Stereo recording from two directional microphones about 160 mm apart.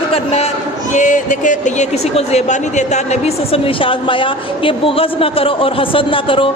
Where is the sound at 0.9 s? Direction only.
50° left (ahead or behind).